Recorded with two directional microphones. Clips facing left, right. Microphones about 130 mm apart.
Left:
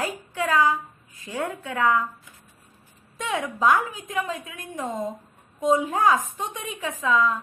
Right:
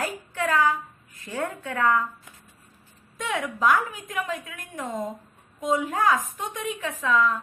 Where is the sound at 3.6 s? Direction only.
20° left (ahead or behind).